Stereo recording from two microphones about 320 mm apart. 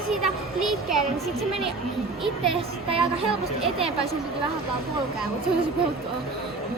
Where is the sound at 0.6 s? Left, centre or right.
Centre.